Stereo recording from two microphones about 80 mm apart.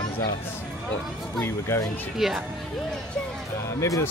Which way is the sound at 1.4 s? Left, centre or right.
Left.